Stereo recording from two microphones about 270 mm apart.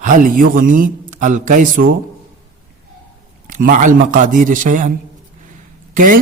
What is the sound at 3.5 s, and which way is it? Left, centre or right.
A man's voice, right.